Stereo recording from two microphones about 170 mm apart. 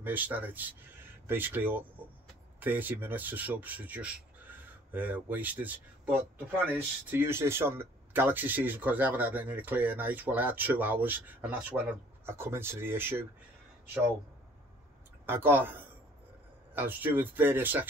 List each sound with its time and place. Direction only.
0.0 s speech: 10° right (ahead or behind)
15.2 s speech: 15° right (ahead or behind)